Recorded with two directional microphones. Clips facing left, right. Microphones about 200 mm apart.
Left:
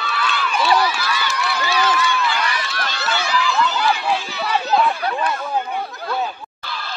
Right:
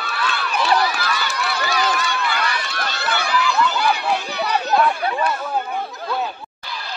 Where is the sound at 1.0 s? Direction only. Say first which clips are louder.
Even; 50° right (ahead or behind).